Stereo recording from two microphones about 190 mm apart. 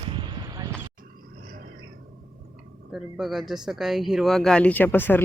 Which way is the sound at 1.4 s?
45° right (ahead or behind).